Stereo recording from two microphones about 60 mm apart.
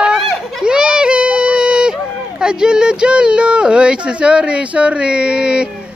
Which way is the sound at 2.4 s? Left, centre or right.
Centre.